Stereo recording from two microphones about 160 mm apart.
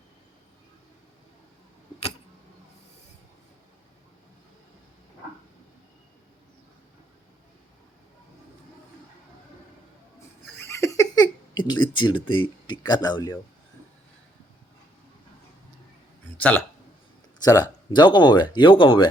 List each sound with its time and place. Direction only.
10.6 s a sound: 15° left (ahead or behind)
12.3 s speech: 30° left (ahead or behind)
16.4 s speech: 10° left (ahead or behind)
17.4 s speech: 25° left (ahead or behind)